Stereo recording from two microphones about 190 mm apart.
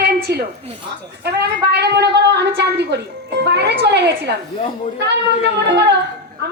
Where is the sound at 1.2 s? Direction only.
60° right (ahead or behind).